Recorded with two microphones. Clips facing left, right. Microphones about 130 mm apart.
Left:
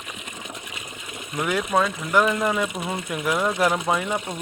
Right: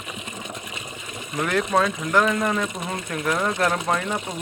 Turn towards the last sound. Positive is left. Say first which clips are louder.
# left 1 dB
turn(degrees=0)  # may be behind; listen again after turning